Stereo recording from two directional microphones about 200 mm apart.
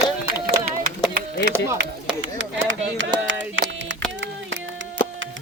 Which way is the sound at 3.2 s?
70° right (ahead or behind).